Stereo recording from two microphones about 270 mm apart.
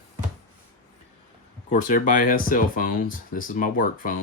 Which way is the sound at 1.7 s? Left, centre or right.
Left.